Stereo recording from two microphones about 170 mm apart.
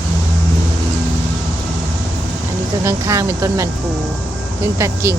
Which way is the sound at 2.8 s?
15° right (ahead or behind).